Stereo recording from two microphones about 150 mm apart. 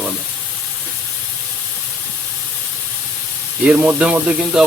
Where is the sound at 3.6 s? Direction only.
5° right (ahead or behind).